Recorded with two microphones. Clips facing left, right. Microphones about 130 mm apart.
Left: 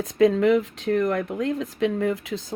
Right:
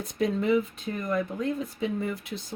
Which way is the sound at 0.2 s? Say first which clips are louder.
Left 7 dB; 90° left.